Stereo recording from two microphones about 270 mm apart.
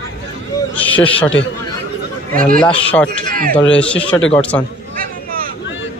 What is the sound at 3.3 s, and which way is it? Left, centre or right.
Speech, right.